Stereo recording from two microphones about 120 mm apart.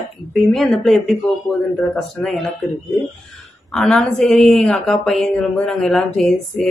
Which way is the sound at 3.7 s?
5° left (ahead or behind).